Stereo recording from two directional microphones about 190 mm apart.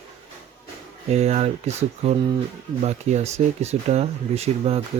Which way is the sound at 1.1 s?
35° right (ahead or behind).